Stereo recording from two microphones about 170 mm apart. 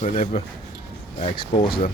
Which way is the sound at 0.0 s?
40° left (ahead or behind).